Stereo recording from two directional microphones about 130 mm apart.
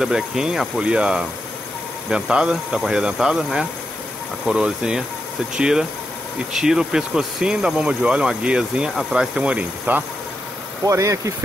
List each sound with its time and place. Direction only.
0.0 s speech: 5° right (ahead or behind)
10.9 s speech: 25° right (ahead or behind)